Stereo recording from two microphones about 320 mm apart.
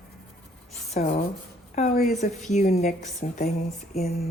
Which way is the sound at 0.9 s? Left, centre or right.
Left.